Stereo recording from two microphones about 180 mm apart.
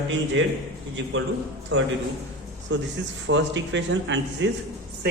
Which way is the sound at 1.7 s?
85° right.